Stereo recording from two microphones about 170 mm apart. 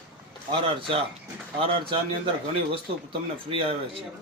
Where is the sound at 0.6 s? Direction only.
30° right (ahead or behind).